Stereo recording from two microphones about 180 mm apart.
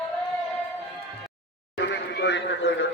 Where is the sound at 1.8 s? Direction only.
75° left (ahead or behind).